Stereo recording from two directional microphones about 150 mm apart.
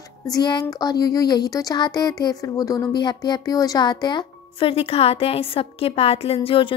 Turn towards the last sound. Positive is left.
turn(degrees=35)  # may be behind; listen again after turning